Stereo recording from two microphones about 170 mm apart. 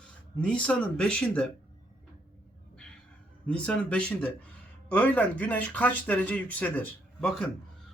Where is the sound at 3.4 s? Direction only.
5° left (ahead or behind).